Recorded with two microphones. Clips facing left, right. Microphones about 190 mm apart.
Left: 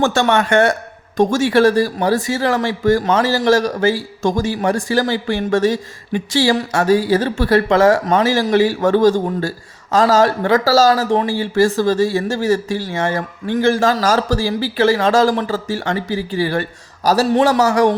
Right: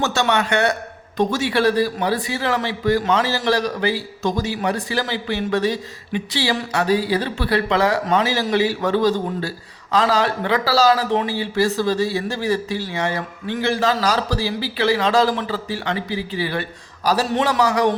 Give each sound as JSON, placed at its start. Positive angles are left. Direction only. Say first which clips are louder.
{"t": 0.0, "sound": "speech", "louder": "left 5 dB", "side_deg": 50}